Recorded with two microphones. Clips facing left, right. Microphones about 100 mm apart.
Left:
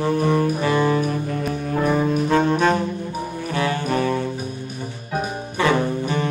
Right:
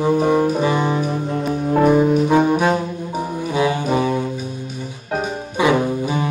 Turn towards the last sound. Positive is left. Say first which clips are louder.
# right 2 dB
turn(degrees=-10)  # may be behind; listen again after turning